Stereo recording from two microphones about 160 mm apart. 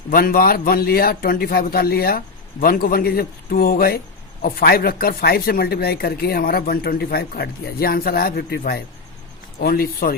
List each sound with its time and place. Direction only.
0.1 s speech: 65° left (ahead or behind); by 8.8 s 80° left
9.6 s speech: 70° left (ahead or behind)